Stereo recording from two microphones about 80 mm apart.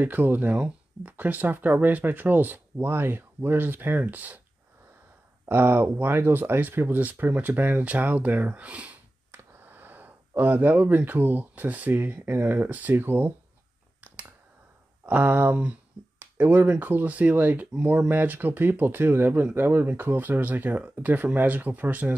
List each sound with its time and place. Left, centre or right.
0.0 s speech: right
5.5 s speech: right
14.0 s finger snapping: centre
15.0 s speech: centre